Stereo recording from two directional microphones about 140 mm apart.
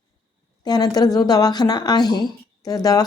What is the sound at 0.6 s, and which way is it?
A woman's voice, 30° left (ahead or behind).